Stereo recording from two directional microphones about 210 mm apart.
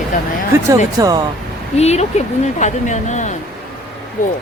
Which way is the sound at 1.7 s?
30° left (ahead or behind).